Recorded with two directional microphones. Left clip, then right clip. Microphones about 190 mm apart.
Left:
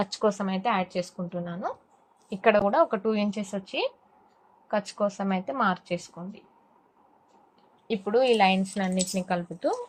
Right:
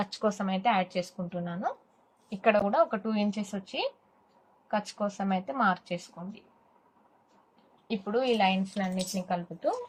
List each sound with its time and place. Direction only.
0.0 s speech: 40° left (ahead or behind)
2.3 s a woman's voice: 50° left (ahead or behind)
7.9 s speech: 55° left (ahead or behind)